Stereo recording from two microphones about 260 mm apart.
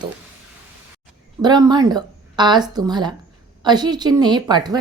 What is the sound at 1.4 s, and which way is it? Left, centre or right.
A woman's voice, centre.